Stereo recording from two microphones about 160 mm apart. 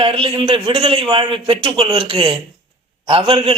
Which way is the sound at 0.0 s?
35° right (ahead or behind).